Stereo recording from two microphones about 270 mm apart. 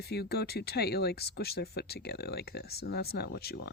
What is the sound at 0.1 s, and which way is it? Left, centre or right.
Speech, left.